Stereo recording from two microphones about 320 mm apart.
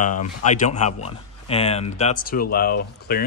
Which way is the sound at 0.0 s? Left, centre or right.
Left.